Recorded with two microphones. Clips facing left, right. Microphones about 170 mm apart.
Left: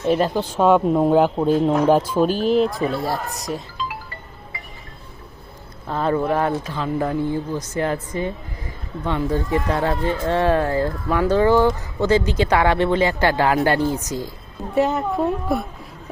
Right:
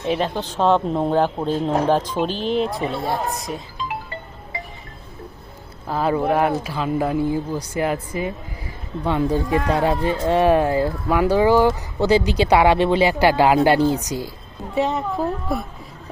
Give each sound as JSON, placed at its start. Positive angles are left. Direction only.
{"t": 0.0, "sound": "speech", "side_deg": 0}
{"t": 3.8, "sound": "music", "side_deg": -20}
{"t": 5.9, "sound": "speech", "side_deg": -5}
{"t": 14.8, "sound": "speech", "side_deg": 0}